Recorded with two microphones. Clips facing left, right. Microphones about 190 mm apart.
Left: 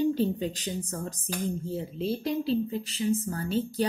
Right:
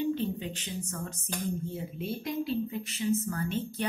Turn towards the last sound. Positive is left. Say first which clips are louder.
# left 4 dB
turn(degrees=35)  # may be behind; listen again after turning